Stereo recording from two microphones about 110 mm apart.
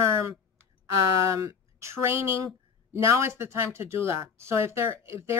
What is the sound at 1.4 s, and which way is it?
A woman's voice, 25° right (ahead or behind).